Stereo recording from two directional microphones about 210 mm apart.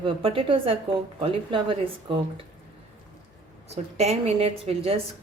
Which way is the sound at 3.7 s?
30° right (ahead or behind).